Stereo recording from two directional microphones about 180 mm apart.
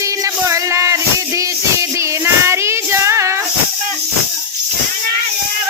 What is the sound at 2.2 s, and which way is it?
Child singing, 15° right (ahead or behind).